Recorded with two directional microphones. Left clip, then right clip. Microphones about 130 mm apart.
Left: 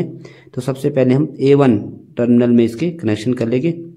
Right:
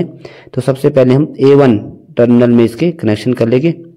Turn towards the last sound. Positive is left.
turn(degrees=-25)  # may be behind; listen again after turning